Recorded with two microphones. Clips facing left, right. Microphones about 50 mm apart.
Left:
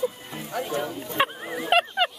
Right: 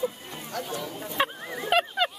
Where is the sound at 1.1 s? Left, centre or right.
Centre.